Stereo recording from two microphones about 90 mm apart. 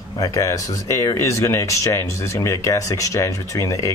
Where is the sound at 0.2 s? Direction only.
40° left (ahead or behind).